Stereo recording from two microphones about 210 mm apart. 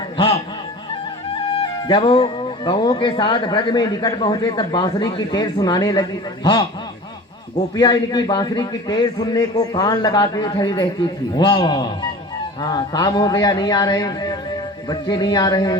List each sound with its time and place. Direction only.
1.3 s speech: 25° left (ahead or behind)
7.8 s speech: 20° left (ahead or behind)